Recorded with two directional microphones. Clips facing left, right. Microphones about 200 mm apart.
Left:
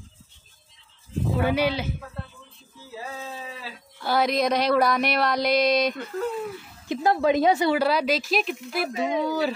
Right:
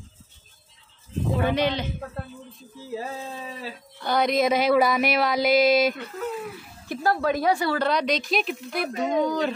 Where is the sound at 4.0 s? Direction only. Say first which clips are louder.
Right 1 dB; 5° left (ahead or behind).